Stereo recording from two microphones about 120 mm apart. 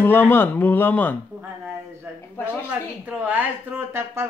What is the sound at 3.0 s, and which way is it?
Speech, 15° right (ahead or behind).